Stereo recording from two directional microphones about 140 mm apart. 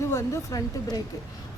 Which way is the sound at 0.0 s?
20° left (ahead or behind).